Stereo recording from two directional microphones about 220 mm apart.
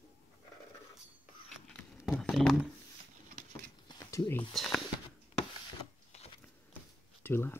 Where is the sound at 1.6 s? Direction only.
5° left (ahead or behind).